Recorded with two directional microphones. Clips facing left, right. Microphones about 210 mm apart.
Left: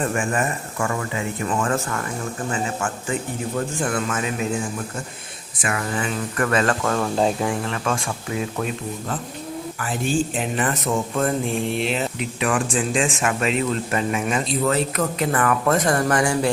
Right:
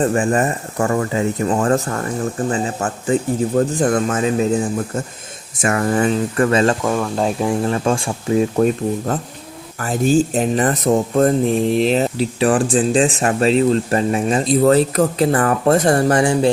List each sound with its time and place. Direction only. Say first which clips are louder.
0.0 s speech: right 6 dB; 35° right (ahead or behind)
6.3 s speech: right 3 dB; 30° right (ahead or behind)
7.0 s speech: right 1 dB; centre (ahead or behind)
7.6 s speech: right 7 dB; 35° right (ahead or behind)